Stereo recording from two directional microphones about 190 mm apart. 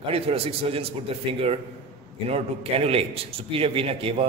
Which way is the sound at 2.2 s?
30° right (ahead or behind).